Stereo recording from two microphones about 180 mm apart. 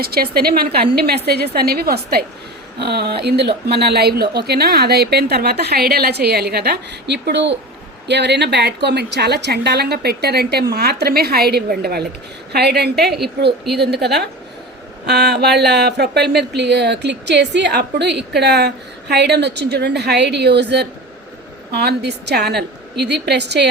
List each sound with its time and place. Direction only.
0.0 s speech: 60° right (ahead or behind)